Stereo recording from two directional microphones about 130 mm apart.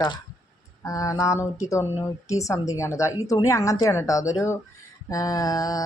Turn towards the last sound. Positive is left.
turn(degrees=30)  # may be behind; listen again after turning